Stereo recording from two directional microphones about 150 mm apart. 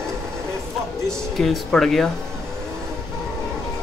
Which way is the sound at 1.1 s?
5° left (ahead or behind).